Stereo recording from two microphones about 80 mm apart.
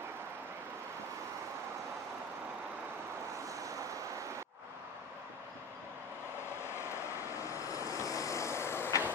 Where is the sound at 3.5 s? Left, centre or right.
Right.